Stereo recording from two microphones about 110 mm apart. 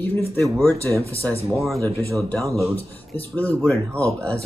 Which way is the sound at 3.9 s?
25° right (ahead or behind).